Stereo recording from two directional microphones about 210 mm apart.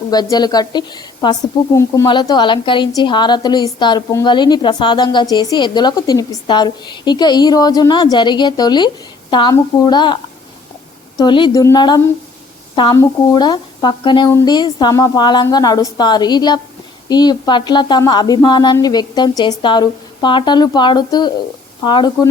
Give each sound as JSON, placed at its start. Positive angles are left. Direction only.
{"t": 0.1, "sound": "a woman's voice", "side_deg": 20}
{"t": 11.2, "sound": "a woman's voice", "side_deg": 20}